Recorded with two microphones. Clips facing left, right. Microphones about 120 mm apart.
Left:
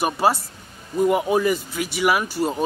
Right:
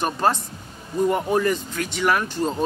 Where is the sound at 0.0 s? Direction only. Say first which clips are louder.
Left 2 dB; 10° left (ahead or behind).